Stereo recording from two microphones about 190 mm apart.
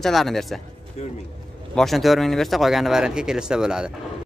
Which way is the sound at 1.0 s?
35° left (ahead or behind).